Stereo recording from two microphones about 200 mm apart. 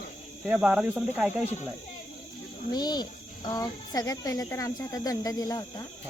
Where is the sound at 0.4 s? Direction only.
5° right (ahead or behind).